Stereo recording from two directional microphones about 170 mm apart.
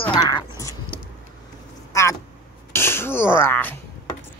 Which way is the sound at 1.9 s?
15° left (ahead or behind).